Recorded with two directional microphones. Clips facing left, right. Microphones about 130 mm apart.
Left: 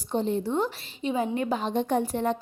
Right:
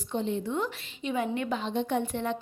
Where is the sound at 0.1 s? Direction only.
35° left (ahead or behind).